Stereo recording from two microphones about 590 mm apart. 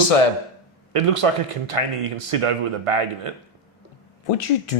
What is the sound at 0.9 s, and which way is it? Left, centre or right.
Speech, right.